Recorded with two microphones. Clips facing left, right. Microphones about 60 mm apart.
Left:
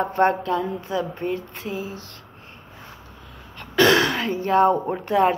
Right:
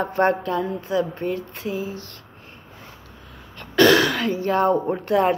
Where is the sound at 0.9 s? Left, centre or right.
Left.